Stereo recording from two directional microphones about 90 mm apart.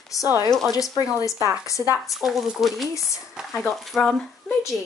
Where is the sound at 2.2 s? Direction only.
Centre (ahead or behind).